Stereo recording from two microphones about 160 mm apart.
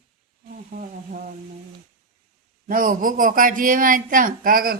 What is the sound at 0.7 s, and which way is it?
Speech, 60° right (ahead or behind).